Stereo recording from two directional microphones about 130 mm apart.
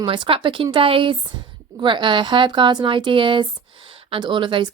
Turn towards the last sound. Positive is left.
turn(degrees=-40)  # may be behind; listen again after turning